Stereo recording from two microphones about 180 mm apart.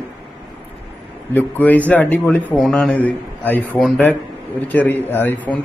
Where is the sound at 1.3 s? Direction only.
10° left (ahead or behind).